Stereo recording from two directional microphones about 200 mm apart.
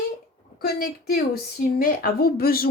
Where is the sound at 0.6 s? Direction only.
50° left (ahead or behind).